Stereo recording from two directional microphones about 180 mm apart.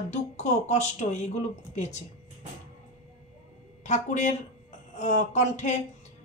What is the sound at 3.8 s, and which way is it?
A woman's voice, 40° left (ahead or behind).